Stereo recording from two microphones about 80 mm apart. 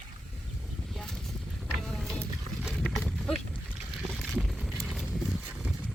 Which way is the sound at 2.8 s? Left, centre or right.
Centre.